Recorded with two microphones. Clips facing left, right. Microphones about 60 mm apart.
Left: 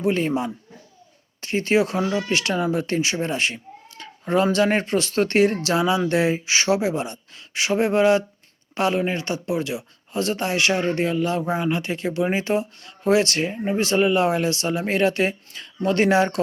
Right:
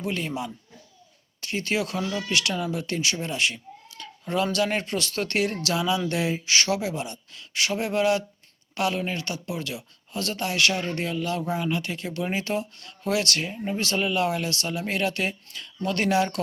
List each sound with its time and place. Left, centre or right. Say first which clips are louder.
0.0 s a man's voice: left 8 dB; left